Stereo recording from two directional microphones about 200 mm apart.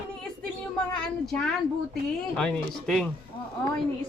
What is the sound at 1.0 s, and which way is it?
Speech, 5° left (ahead or behind).